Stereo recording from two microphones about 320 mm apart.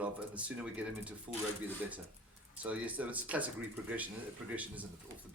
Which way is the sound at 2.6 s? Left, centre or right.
Centre.